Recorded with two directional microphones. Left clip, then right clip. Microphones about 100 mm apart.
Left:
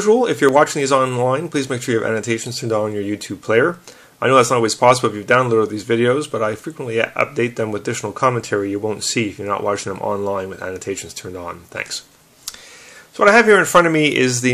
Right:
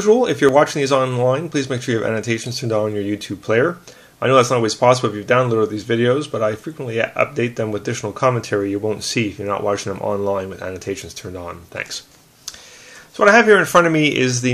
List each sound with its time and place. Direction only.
0.0 s speech: 20° left (ahead or behind)
13.2 s speech: 20° left (ahead or behind)